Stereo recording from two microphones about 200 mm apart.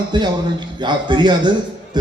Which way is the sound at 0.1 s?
20° right (ahead or behind).